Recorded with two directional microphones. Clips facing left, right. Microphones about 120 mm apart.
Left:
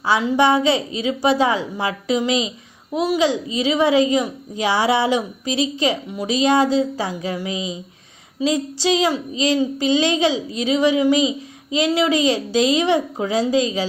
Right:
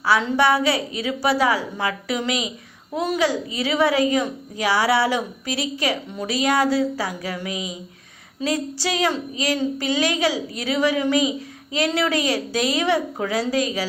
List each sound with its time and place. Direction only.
0.0 s a woman's voice: 20° left (ahead or behind)